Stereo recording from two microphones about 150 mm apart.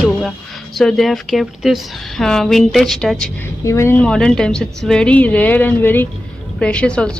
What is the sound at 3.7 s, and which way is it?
Speech, 15° left (ahead or behind).